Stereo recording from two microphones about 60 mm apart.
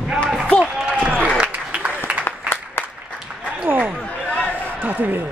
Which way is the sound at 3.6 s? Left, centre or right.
Right.